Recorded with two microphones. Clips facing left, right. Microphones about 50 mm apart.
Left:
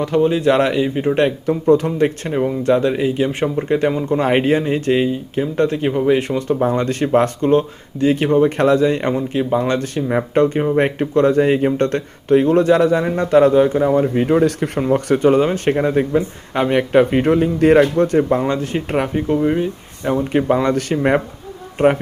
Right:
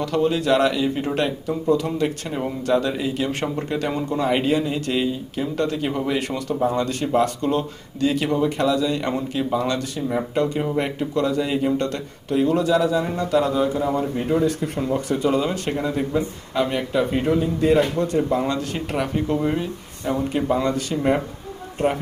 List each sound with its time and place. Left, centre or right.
0.0 s speech: left
1.2 s speech: left
4.2 s speech: left
10.4 s speech: left
14.2 s speech: left
14.8 s a man's voice: left
16.9 s speech: left
17.9 s a man's voice: left
18.3 s speech: left
19.4 s speech: centre
20.3 s a man's voice: left